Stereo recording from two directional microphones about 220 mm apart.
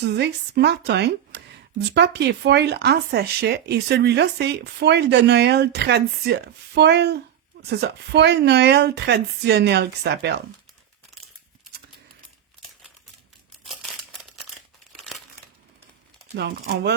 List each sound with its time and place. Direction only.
0.0 s speech: 50° right (ahead or behind)
13.7 s crumpling: centre (ahead or behind)
16.3 s speech: 50° right (ahead or behind)